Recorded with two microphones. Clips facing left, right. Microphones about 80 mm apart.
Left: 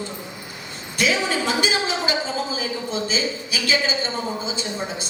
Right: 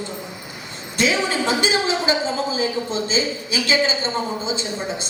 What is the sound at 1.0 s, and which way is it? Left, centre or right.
A woman's voice, right.